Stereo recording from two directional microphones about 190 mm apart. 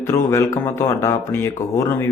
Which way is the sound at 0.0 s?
15° left (ahead or behind).